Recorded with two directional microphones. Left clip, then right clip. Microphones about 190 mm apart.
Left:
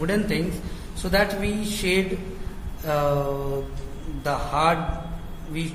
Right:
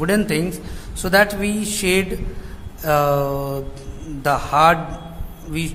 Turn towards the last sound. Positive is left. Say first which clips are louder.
# right 5 dB
turn(degrees=-45)  # may be behind; listen again after turning